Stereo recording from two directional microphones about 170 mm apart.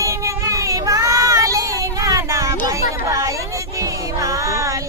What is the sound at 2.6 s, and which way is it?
Music, 15° right (ahead or behind).